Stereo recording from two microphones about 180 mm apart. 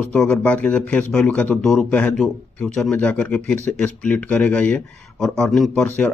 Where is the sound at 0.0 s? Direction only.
5° left (ahead or behind).